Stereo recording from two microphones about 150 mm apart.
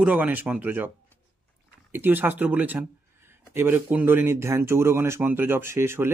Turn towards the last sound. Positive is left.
turn(degrees=-15)  # may be behind; listen again after turning